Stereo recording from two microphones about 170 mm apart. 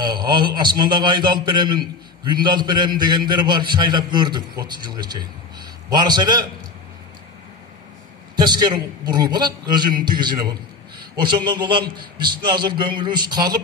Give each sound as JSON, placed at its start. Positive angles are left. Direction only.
{"t": 0.0, "sound": "a man's voice", "side_deg": -25}
{"t": 8.4, "sound": "a man's voice", "side_deg": -25}